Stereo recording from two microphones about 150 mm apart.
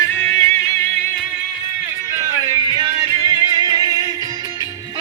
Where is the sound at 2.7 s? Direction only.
25° right (ahead or behind).